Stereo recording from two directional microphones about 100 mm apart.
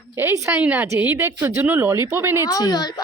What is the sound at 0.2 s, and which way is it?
Speech, 25° right (ahead or behind).